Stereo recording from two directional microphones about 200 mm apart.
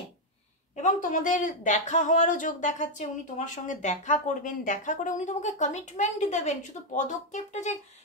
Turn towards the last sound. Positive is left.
turn(degrees=35)  # may be behind; listen again after turning